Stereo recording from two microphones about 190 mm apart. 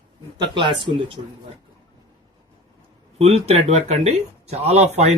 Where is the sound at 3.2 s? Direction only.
30° right (ahead or behind).